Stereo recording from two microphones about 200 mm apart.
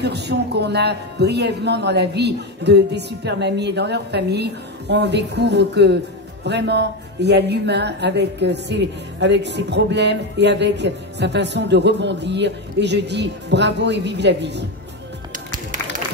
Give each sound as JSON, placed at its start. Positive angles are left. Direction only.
{"t": 0.0, "sound": "a woman's voice", "side_deg": -55}